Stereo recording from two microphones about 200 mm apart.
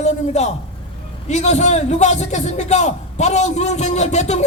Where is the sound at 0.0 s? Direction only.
35° left (ahead or behind).